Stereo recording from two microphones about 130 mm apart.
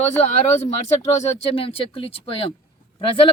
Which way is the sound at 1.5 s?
45° left (ahead or behind).